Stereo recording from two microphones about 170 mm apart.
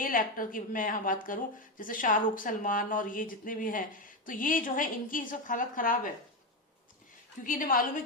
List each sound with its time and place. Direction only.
0.0 s a woman's voice: 55° left (ahead or behind)
7.4 s a woman's voice: 55° left (ahead or behind)